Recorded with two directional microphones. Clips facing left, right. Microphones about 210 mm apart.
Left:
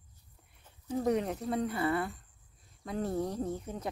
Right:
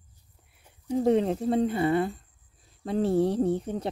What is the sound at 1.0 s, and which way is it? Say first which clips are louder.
Speech: right 8 dB; 30° right (ahead or behind).